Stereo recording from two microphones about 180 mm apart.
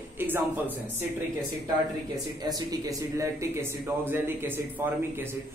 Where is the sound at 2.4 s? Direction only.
20° right (ahead or behind).